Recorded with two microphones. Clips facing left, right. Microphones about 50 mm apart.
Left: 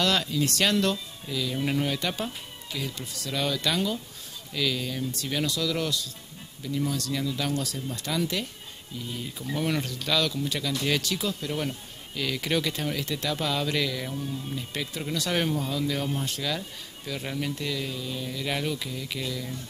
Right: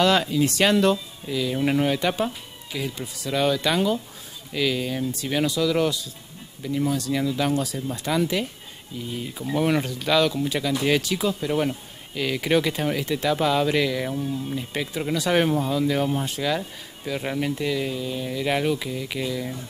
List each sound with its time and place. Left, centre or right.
0.0 s speech: centre